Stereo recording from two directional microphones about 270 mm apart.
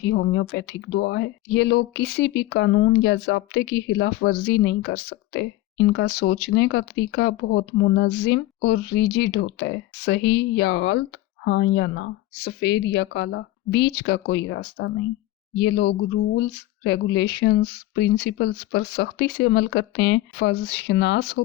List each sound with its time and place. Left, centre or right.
0.0 s speech: left